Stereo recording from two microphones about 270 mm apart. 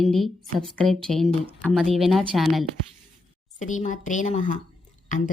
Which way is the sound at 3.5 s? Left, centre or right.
Left.